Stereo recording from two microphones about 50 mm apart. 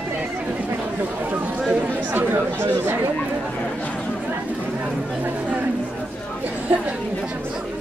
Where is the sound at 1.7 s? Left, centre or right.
Right.